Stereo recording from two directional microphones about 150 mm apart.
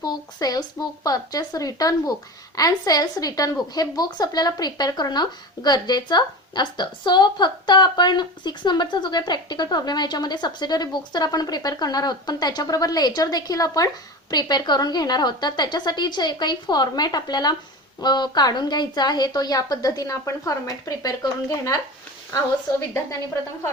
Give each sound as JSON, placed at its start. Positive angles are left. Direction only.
{"t": 0.0, "sound": "a woman's voice", "side_deg": 25}